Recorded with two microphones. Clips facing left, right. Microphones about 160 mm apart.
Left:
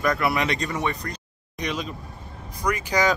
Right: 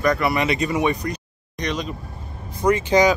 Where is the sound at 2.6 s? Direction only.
25° right (ahead or behind).